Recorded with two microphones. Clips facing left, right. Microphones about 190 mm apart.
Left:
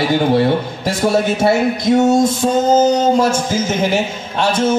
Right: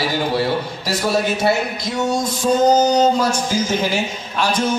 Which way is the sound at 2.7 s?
25° left (ahead or behind).